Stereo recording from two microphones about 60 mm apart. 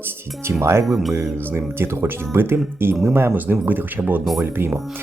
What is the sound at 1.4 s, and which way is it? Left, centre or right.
Speech, right.